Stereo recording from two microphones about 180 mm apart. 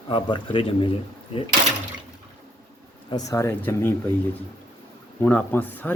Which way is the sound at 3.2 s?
15° left (ahead or behind).